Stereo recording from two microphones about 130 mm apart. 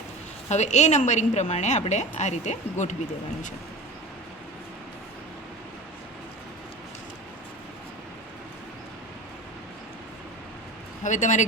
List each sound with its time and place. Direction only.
0.4 s a woman's voice: 60° left (ahead or behind)
11.0 s speech: 70° left (ahead or behind)